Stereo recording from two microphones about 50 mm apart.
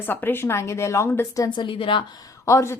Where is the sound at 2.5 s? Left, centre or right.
Left.